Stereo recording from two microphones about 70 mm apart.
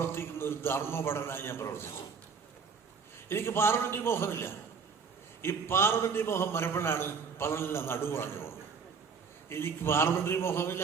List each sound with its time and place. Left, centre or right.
0.0 s a man's voice: left
3.2 s a man's voice: left